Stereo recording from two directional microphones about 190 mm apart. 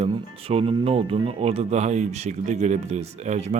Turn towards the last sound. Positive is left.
turn(degrees=-40)  # may be behind; listen again after turning